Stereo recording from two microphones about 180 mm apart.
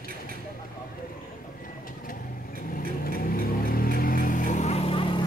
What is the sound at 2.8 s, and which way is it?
Vehicle, 55° left (ahead or behind).